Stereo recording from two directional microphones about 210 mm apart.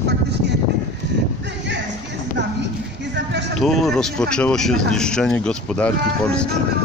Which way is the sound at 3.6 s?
Centre (ahead or behind).